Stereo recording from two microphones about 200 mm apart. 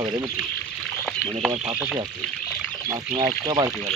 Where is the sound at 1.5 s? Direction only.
30° right (ahead or behind).